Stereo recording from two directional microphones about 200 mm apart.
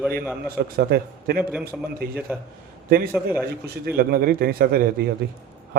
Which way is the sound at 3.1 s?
5° right (ahead or behind).